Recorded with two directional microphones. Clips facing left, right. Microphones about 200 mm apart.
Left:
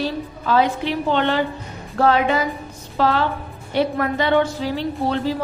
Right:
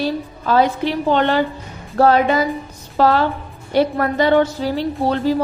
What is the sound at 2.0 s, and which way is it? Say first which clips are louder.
A woman's voice: right 3 dB; 40° right (ahead or behind).